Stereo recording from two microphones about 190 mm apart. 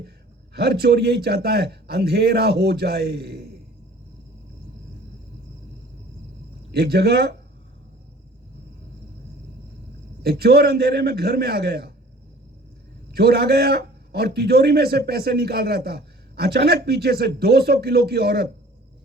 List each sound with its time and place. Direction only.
0.5 s a man's voice: 55° right (ahead or behind)
6.7 s a man's voice: 55° right (ahead or behind)
10.2 s a man's voice: 55° right (ahead or behind)
13.1 s a man's voice: 55° right (ahead or behind)